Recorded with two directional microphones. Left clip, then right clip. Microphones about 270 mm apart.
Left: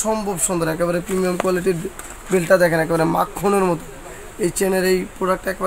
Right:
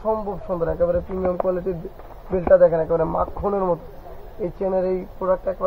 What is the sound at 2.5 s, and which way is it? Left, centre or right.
Speech, left.